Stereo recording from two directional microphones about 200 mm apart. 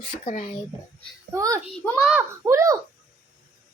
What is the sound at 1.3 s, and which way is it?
Speech, 15° right (ahead or behind).